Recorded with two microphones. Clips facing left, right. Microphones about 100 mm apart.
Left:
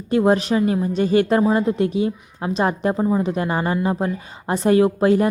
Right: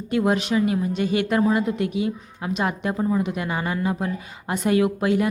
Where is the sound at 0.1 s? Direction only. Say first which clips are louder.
Left 4 dB; 35° left (ahead or behind).